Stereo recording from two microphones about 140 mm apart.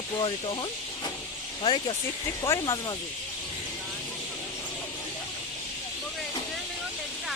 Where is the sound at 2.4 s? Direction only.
25° left (ahead or behind).